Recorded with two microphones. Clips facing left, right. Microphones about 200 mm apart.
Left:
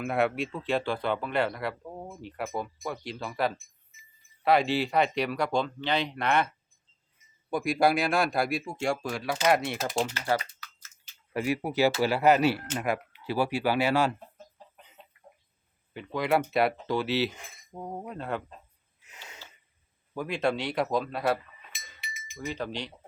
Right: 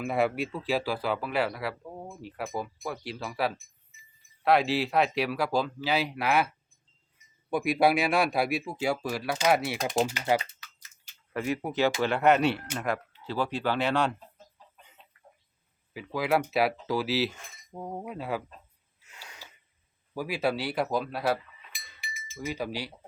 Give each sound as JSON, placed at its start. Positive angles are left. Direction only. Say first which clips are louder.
{"t": 0.0, "sound": "speech", "louder": "even", "side_deg": 0}
{"t": 7.5, "sound": "speech", "louder": "right 1 dB", "side_deg": -5}
{"t": 10.2, "sound": "typing", "louder": "right 2 dB", "side_deg": -20}
{"t": 11.3, "sound": "speech", "louder": "left 2 dB", "side_deg": 10}
{"t": 15.9, "sound": "speech", "louder": "even", "side_deg": -5}
{"t": 19.1, "sound": "a sound", "louder": "left 1 dB", "side_deg": 20}
{"t": 20.1, "sound": "speech", "louder": "left 1 dB", "side_deg": -5}
{"t": 21.7, "sound": "chink", "louder": "right 1 dB", "side_deg": 20}
{"t": 22.4, "sound": "wind chime", "louder": "right 1 dB", "side_deg": -10}